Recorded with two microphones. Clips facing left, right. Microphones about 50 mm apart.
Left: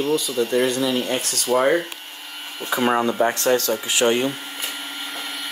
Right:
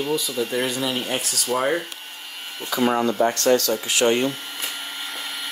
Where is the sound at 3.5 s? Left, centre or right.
Left.